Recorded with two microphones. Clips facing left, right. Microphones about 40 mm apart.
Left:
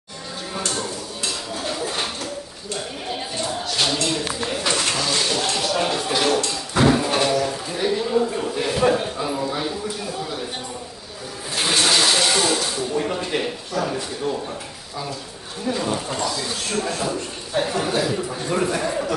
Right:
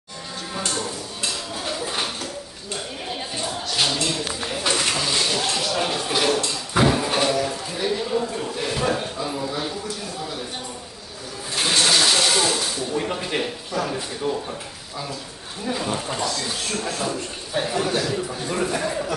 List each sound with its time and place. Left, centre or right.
1.8 s a man's voice: centre
3.6 s a sound: centre
7.0 s music: centre
11.5 s a sound: centre
13.0 s speech: centre
14.2 s speech: centre
15.6 s a man's voice: centre